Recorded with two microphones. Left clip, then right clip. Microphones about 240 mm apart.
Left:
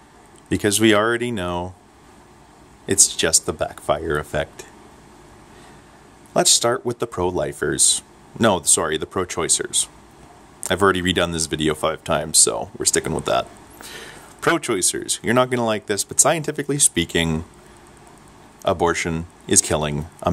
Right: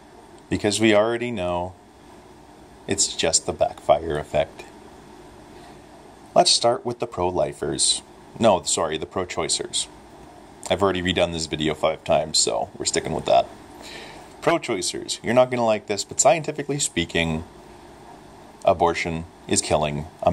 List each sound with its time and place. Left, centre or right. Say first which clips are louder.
0.5 s speech: left 2 dB; left
2.9 s speech: left 4 dB; left
6.3 s speech: even; left
18.6 s speech: even; left